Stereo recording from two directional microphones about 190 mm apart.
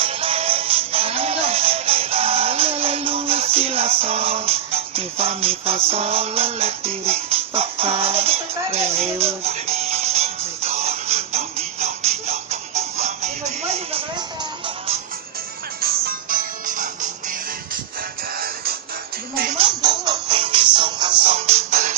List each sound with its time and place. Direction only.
0.0 s music: 30° right (ahead or behind)
15.8 s music: 50° right (ahead or behind)
18.3 s music: 50° right (ahead or behind)
19.5 s music: 25° right (ahead or behind)